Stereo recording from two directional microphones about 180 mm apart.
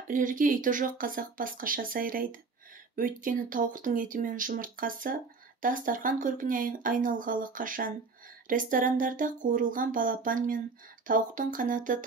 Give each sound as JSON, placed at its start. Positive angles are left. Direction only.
{"t": 0.1, "sound": "speech", "side_deg": -50}